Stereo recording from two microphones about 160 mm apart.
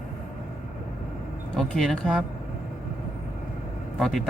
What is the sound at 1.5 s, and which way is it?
Speech, 5° left (ahead or behind).